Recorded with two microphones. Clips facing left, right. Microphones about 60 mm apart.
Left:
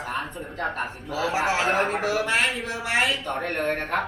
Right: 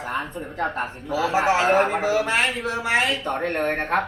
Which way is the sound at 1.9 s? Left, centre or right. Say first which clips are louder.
Right 3 dB; right.